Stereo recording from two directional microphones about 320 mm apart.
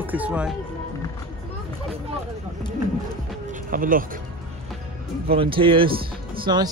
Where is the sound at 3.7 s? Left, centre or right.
Right.